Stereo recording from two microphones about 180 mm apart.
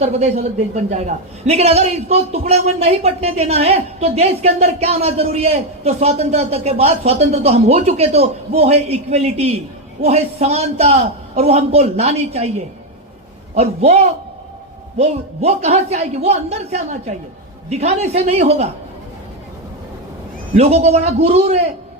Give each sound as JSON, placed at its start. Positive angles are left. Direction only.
{"t": 0.0, "sound": "a man's voice", "side_deg": -35}
{"t": 20.6, "sound": "a man's voice", "side_deg": -35}